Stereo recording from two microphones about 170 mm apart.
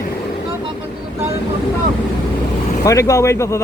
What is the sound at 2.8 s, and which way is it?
Speech, 20° left (ahead or behind).